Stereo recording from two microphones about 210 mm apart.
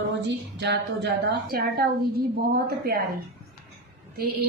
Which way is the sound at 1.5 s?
45° right (ahead or behind).